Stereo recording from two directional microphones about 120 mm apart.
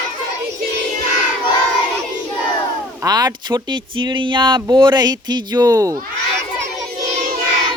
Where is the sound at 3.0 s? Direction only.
30° right (ahead or behind).